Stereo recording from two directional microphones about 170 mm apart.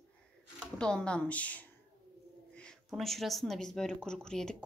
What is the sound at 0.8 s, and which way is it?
A woman's voice, 5° left (ahead or behind).